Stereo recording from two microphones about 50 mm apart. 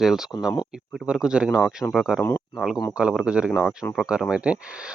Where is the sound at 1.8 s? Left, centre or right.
Left.